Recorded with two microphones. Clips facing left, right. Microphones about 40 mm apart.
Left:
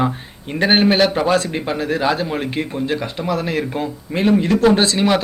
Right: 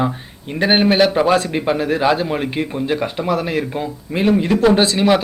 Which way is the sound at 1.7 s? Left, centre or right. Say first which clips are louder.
Right 1 dB; right.